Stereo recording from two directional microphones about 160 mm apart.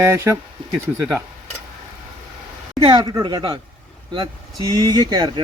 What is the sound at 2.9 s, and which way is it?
Speech, 25° right (ahead or behind).